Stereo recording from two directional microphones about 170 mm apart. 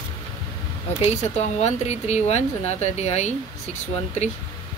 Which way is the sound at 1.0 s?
40° left (ahead or behind).